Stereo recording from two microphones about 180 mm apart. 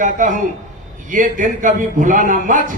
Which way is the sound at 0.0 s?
45° right (ahead or behind).